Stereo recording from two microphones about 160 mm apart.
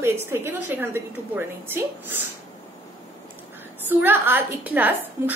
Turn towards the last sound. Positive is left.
turn(degrees=-10)  # may be behind; listen again after turning